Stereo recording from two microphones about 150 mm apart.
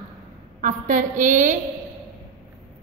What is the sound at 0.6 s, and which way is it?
Speech, 60° right (ahead or behind).